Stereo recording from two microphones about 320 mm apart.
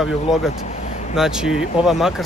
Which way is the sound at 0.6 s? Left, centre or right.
Left.